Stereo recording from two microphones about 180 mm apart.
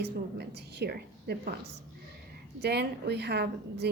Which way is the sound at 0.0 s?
65° right (ahead or behind).